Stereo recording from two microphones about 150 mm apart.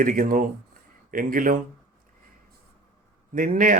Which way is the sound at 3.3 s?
65° right (ahead or behind).